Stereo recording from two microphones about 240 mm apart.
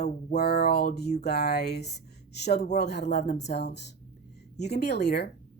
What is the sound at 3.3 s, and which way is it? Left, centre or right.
Speech, left.